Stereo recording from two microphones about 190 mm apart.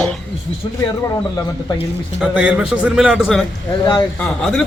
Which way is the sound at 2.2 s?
5° right (ahead or behind).